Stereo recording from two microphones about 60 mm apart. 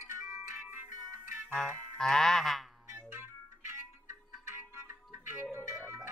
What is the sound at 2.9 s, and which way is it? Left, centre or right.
Music, right.